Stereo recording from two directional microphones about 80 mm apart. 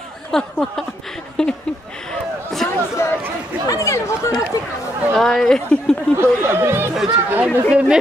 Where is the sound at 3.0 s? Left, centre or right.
Left.